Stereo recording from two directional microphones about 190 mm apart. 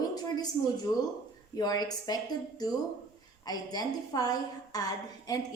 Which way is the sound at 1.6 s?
20° left (ahead or behind).